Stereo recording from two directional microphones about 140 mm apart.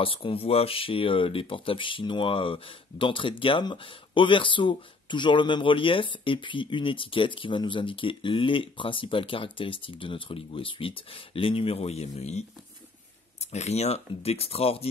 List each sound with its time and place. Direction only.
0.0 s speech: 40° left (ahead or behind)
13.5 s speech: 50° left (ahead or behind)